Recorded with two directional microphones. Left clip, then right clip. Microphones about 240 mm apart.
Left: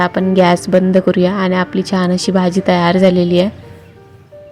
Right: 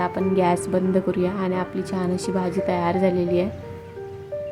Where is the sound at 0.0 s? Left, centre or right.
Left.